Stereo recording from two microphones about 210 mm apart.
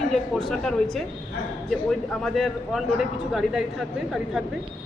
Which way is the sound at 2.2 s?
Centre (ahead or behind).